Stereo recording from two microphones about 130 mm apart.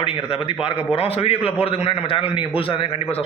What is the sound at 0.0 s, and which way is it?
Speech, 45° left (ahead or behind).